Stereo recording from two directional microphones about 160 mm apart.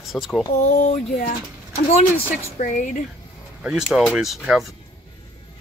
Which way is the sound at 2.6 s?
50° left (ahead or behind).